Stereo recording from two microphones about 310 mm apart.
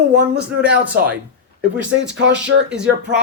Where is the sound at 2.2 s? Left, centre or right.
Right.